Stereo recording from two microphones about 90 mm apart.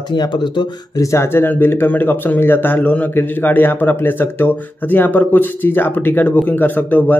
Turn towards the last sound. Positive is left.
turn(degrees=20)  # may be behind; listen again after turning